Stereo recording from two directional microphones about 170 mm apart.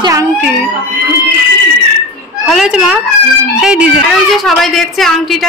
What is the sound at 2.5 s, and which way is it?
A woman's voice, 5° right (ahead or behind).